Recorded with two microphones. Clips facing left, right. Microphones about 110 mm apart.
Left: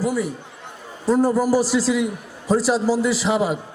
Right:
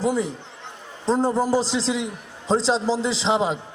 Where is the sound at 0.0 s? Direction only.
20° right (ahead or behind).